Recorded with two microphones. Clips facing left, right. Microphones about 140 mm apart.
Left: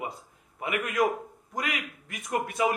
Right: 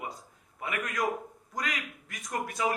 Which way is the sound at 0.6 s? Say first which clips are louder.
Left 5 dB; 25° left (ahead or behind).